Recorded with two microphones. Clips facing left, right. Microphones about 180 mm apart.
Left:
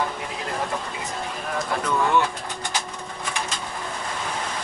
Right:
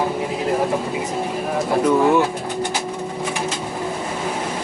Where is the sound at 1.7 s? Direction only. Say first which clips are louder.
Right 8 dB; 30° right (ahead or behind).